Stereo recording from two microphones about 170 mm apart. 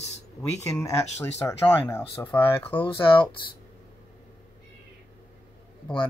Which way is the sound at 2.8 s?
30° left (ahead or behind).